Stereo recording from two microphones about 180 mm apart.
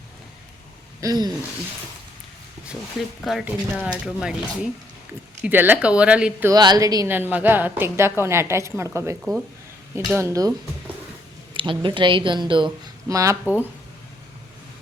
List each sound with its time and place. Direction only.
1.0 s speech: 20° right (ahead or behind)
3.2 s speech: centre (ahead or behind)
5.4 s a woman's voice: 10° right (ahead or behind)
6.5 s a woman's voice: 20° right (ahead or behind)
11.5 s speech: 30° right (ahead or behind)